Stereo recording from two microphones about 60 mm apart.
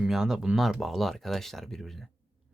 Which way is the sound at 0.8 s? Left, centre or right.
Centre.